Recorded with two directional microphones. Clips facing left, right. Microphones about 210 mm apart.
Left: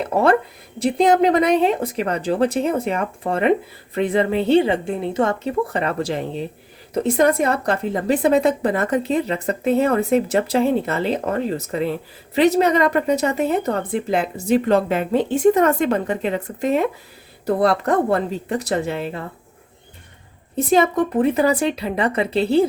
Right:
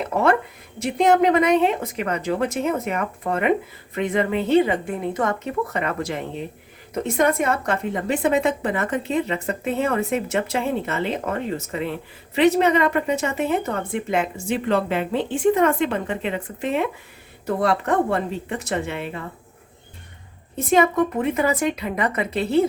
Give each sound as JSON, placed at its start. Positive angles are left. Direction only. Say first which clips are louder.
{"t": 0.0, "sound": "a woman's voice", "louder": "left 3 dB", "side_deg": 35}
{"t": 20.7, "sound": "a woman's voice", "louder": "left 1 dB", "side_deg": 35}